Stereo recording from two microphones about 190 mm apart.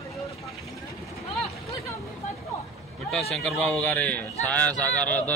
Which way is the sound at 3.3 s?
Centre (ahead or behind).